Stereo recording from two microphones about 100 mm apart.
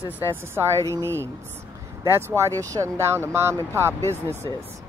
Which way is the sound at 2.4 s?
30° right (ahead or behind).